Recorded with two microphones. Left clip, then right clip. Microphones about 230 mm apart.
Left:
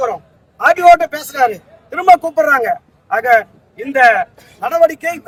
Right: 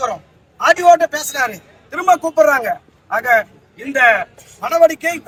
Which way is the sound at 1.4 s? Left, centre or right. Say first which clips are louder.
Left 8 dB; centre.